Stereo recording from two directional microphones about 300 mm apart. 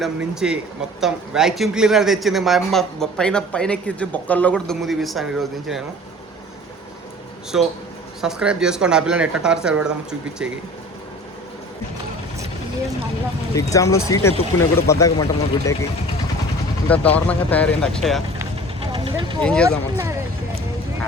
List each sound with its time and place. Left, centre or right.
0.0 s speech: centre
7.5 s speech: centre
13.6 s speech: centre
16.9 s speech: centre
18.8 s vehicle: centre
19.4 s speech: centre